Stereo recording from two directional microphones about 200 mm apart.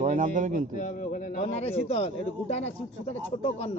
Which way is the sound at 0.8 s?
45° left (ahead or behind).